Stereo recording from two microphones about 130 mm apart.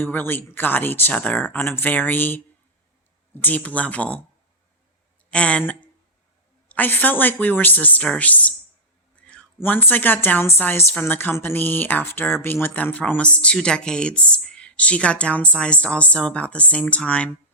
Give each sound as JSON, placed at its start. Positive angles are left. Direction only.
{"t": 0.0, "sound": "a woman's voice", "side_deg": 15}
{"t": 3.4, "sound": "a woman's voice", "side_deg": 10}
{"t": 5.3, "sound": "a woman's voice", "side_deg": 10}